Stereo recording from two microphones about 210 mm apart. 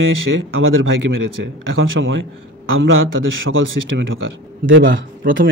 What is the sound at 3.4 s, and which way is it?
A man's voice, 65° right (ahead or behind).